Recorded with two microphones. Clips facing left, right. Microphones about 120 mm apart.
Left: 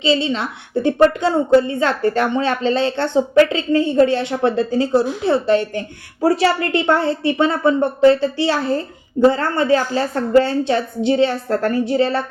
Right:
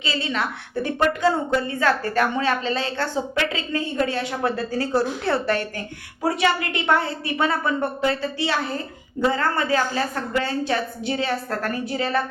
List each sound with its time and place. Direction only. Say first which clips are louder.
0.0 s a woman's voice: left 7 dB; 25° left (ahead or behind)
6.2 s a woman's voice: left 6 dB; 35° left (ahead or behind)